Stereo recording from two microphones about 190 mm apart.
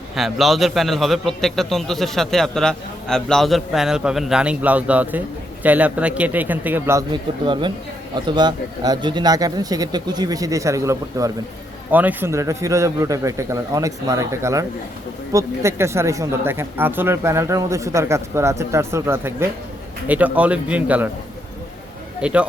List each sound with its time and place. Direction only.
0.2 s a man's voice: centre (ahead or behind)
7.1 s a man's voice: 25° right (ahead or behind); by 21.1 s 10° right (ahead or behind)
22.2 s speech: 5° right (ahead or behind)